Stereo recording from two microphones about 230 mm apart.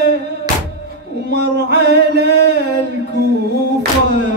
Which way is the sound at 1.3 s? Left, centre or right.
Right.